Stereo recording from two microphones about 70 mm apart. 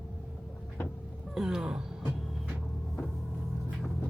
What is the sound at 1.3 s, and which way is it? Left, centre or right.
Speech, centre.